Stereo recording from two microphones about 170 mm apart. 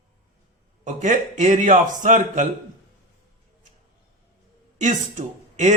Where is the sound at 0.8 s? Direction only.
50° right (ahead or behind).